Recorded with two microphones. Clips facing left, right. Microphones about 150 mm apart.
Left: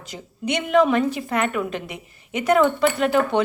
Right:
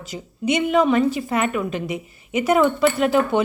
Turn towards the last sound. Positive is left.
turn(degrees=-5)  # may be behind; listen again after turning